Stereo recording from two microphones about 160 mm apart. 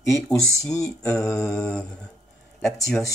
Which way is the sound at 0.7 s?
20° left (ahead or behind).